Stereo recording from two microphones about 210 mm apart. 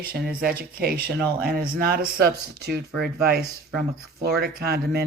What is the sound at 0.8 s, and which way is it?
Speech, 50° right (ahead or behind).